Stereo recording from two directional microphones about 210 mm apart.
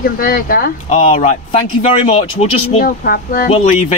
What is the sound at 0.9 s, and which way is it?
Speech, 30° left (ahead or behind).